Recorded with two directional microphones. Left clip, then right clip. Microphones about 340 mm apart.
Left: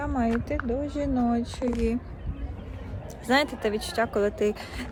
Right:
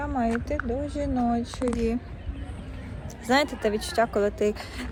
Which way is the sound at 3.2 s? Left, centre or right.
Centre.